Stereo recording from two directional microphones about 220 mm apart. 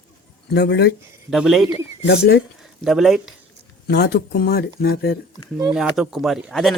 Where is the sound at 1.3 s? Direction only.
Centre (ahead or behind).